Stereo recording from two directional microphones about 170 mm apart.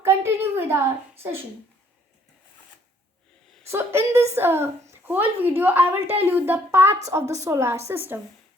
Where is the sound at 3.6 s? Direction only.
15° right (ahead or behind).